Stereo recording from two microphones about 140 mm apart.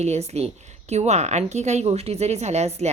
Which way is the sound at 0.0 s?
50° right (ahead or behind).